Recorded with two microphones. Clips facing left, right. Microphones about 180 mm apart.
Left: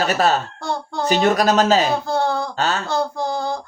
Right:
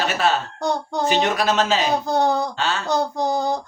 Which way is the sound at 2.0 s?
20° right (ahead or behind).